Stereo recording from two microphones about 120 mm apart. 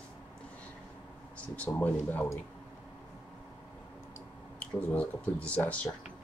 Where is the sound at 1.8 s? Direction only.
15° left (ahead or behind).